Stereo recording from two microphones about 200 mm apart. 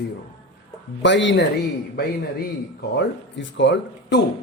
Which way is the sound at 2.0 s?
55° left (ahead or behind).